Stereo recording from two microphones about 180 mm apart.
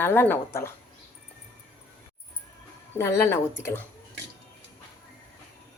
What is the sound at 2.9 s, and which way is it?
Speech, 15° left (ahead or behind).